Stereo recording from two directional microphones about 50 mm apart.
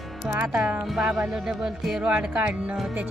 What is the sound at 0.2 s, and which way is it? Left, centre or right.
Speech, right.